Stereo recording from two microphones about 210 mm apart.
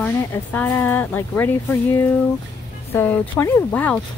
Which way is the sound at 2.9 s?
10° left (ahead or behind).